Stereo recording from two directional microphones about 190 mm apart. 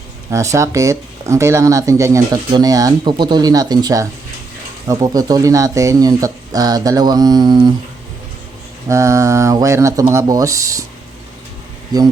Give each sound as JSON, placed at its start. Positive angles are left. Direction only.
{"t": 0.3, "sound": "speech", "side_deg": -15}
{"t": 8.9, "sound": "speech", "side_deg": -15}